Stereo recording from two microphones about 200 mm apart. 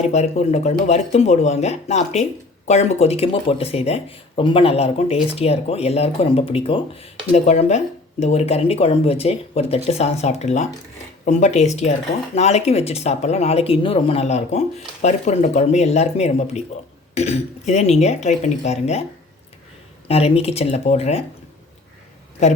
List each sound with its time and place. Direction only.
0.1 s speech: 35° left (ahead or behind)
20.1 s speech: 30° left (ahead or behind)